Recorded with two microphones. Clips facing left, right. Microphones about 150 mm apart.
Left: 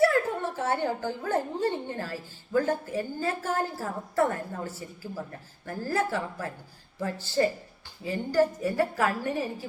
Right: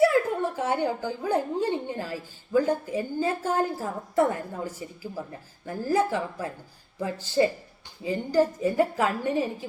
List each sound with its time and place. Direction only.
0.0 s a woman's voice: 15° right (ahead or behind)